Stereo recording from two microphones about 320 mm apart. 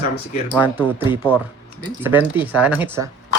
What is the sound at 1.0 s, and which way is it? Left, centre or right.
Speech, centre.